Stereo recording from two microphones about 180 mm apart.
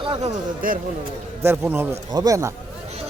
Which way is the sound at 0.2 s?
50° right (ahead or behind).